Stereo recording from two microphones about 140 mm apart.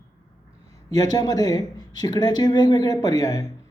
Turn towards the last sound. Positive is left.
turn(degrees=25)  # may be behind; listen again after turning